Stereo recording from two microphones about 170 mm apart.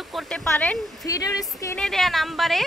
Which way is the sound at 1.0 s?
20° left (ahead or behind).